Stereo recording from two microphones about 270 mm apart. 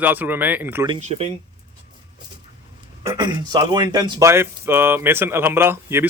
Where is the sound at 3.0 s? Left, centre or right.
Centre.